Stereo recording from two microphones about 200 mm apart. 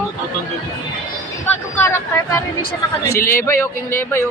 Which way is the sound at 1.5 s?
10° left (ahead or behind).